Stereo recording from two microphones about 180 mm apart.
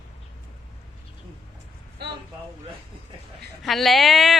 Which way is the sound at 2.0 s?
65° right (ahead or behind).